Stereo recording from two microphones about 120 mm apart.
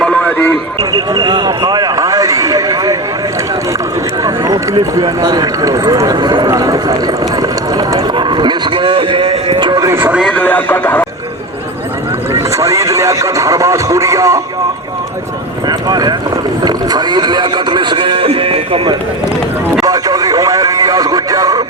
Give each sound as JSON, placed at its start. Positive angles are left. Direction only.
{"t": 0.3, "sound": "a sound", "side_deg": 15}
{"t": 0.8, "sound": "a sound", "side_deg": -35}
{"t": 4.2, "sound": "speech", "side_deg": -30}
{"t": 9.8, "sound": "speech", "side_deg": -20}
{"t": 10.1, "sound": "a man's voice", "side_deg": -5}
{"t": 10.3, "sound": "speech", "side_deg": 15}
{"t": 12.3, "sound": "speech", "side_deg": -25}
{"t": 15.9, "sound": "speech", "side_deg": -35}
{"t": 19.8, "sound": "radio", "side_deg": -30}